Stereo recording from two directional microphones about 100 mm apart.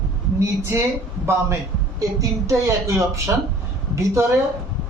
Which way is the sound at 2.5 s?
30° right (ahead or behind).